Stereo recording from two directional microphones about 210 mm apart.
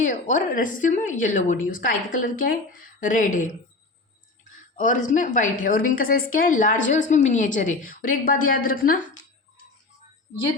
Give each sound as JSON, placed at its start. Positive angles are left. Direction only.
{"t": 0.0, "sound": "a woman's voice", "side_deg": 35}
{"t": 4.5, "sound": "a woman's voice", "side_deg": 35}